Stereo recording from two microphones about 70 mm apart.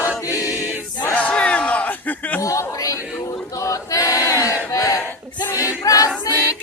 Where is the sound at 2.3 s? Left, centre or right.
Left.